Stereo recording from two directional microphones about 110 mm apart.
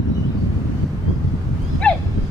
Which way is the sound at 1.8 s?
10° left (ahead or behind).